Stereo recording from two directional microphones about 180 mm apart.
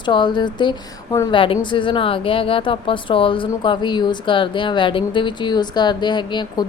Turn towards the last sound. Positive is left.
turn(degrees=25)  # may be behind; listen again after turning